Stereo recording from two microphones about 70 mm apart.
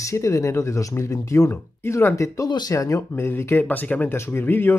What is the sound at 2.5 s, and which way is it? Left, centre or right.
Speech, left.